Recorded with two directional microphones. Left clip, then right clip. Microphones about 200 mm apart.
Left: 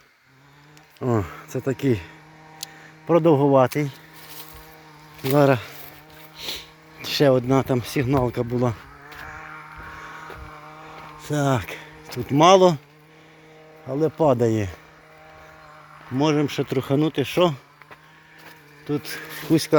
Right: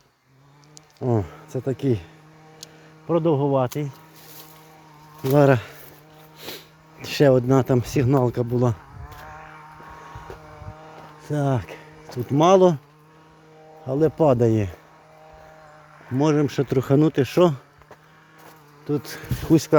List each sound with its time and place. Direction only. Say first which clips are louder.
1.0 s speech: even; centre (ahead or behind)
3.1 s speech: left 4 dB; 15° left (ahead or behind)
5.4 s speech: right 1 dB; 25° right (ahead or behind)
9.1 s vehicle: left 4 dB; 55° left (ahead or behind)
11.3 s speech: left 2 dB; 10° right (ahead or behind)
13.8 s speech: right 1 dB; 20° right (ahead or behind)
16.1 s speech: right 1 dB; 25° right (ahead or behind)
18.9 s speech: right 1 dB; 20° right (ahead or behind)